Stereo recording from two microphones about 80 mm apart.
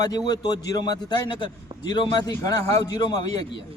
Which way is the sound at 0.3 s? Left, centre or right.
Left.